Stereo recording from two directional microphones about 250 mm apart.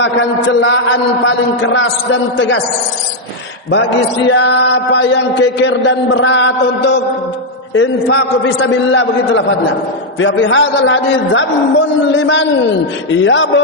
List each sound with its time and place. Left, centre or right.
0.0 s mantra: left
3.7 s mantra: left